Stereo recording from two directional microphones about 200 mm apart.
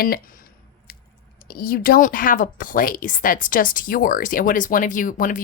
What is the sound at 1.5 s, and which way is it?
Speech, 50° left (ahead or behind).